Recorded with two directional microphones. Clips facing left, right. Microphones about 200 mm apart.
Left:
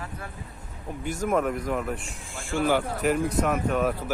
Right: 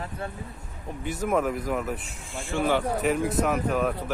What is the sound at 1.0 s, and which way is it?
Speech, centre (ahead or behind).